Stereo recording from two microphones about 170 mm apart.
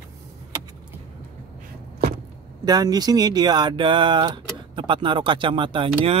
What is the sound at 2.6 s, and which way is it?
Speech, 20° right (ahead or behind).